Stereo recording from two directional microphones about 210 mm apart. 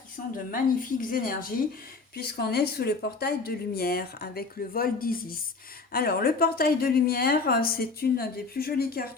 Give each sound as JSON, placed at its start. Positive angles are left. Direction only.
{"t": 0.5, "sound": "speech", "side_deg": 40}